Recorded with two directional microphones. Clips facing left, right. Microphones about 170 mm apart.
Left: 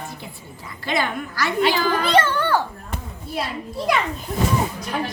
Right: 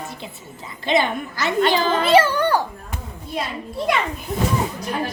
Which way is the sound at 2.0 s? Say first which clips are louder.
Right 5 dB; 5° right (ahead or behind).